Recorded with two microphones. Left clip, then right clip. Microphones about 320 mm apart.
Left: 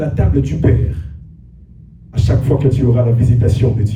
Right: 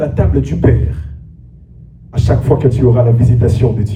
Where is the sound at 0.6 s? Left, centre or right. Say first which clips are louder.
Right 4 dB; centre.